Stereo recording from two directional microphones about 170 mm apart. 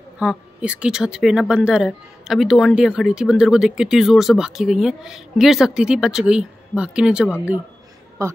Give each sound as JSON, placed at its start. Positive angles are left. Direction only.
{"t": 0.2, "sound": "speech", "side_deg": -5}
{"t": 8.2, "sound": "speech", "side_deg": -15}